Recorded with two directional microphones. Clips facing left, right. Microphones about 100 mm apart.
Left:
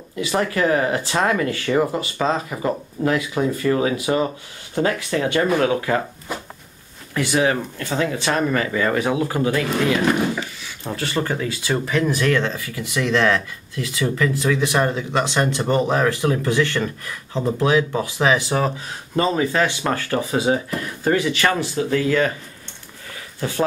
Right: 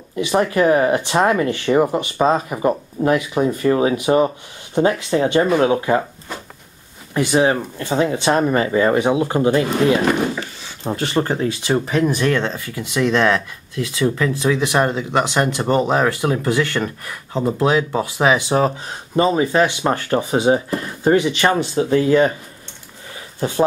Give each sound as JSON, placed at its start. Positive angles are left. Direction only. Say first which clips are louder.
{"t": 0.1, "sound": "speech", "louder": "right 4 dB", "side_deg": -25}
{"t": 7.2, "sound": "speech", "louder": "right 3 dB", "side_deg": -25}
{"t": 23.1, "sound": "a sound", "louder": "right 4 dB", "side_deg": -25}